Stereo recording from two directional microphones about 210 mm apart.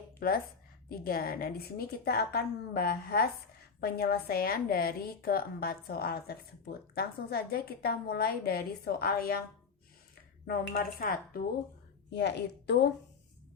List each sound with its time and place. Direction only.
0.2 s a woman's voice: 45° left (ahead or behind)
10.4 s a woman's voice: 50° left (ahead or behind)
12.1 s a woman's voice: 55° left (ahead or behind)